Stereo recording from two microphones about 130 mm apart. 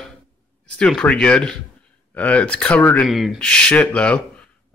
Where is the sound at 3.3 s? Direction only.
10° left (ahead or behind).